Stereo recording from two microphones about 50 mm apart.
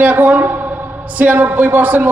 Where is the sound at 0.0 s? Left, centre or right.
Right.